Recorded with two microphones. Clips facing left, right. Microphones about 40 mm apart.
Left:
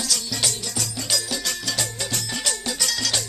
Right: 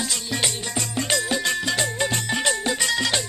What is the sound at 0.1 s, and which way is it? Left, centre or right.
Music, right.